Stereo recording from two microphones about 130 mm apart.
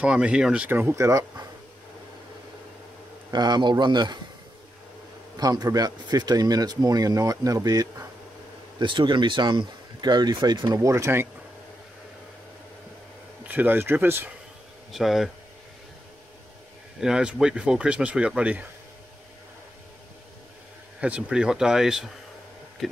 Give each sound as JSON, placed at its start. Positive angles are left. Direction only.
{"t": 0.0, "sound": "speech", "side_deg": -10}
{"t": 3.3, "sound": "speech", "side_deg": -35}
{"t": 5.4, "sound": "speech", "side_deg": -30}
{"t": 13.5, "sound": "speech", "side_deg": -15}
{"t": 14.9, "sound": "speech", "side_deg": 0}
{"t": 17.0, "sound": "speech", "side_deg": -5}
{"t": 21.0, "sound": "speech", "side_deg": -10}